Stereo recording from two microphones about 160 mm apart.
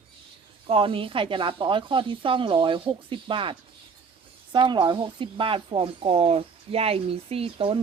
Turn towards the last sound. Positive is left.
turn(degrees=-35)  # may be behind; listen again after turning